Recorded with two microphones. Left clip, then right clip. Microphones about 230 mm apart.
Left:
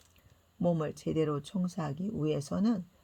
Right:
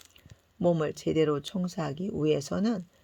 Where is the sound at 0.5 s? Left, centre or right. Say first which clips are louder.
Right 5 dB; right.